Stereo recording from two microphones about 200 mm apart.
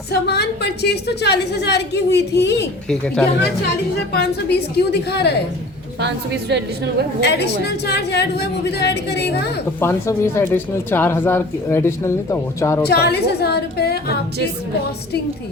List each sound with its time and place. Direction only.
0.1 s a woman's voice: 55° left (ahead or behind)
2.9 s speech: 5° left (ahead or behind)
4.1 s a woman's voice: 55° left (ahead or behind)
6.0 s a woman's voice: 60° right (ahead or behind)
7.2 s a woman's voice: 55° left (ahead or behind)
9.8 s speech: 15° left (ahead or behind)
12.9 s a woman's voice: 55° left (ahead or behind)